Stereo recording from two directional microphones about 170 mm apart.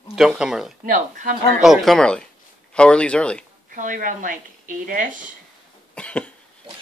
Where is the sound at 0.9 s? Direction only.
50° right (ahead or behind).